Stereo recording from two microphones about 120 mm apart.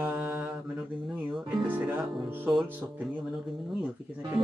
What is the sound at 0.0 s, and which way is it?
Mantra, 15° right (ahead or behind).